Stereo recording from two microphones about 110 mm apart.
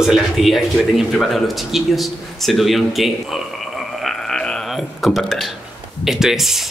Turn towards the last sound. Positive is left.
turn(degrees=-5)  # may be behind; listen again after turning